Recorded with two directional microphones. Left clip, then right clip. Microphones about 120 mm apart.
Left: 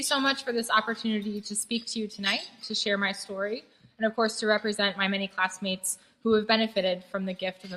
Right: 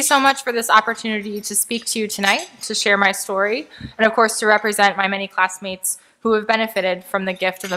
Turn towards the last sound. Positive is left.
turn(degrees=-45)  # may be behind; listen again after turning